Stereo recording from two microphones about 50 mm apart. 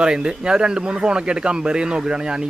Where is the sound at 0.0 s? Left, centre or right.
Centre.